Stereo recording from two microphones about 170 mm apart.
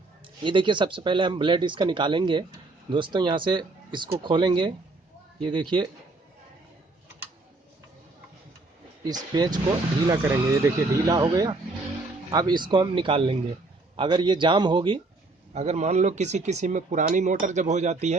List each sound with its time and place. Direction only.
0.4 s speech: 30° right (ahead or behind)
9.0 s speech: 25° right (ahead or behind)
15.5 s speech: 40° right (ahead or behind)